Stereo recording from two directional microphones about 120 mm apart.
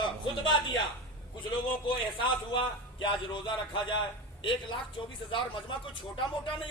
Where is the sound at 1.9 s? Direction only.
45° left (ahead or behind).